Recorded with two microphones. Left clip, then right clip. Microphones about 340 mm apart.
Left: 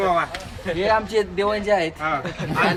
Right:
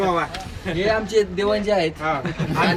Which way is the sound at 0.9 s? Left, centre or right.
Centre.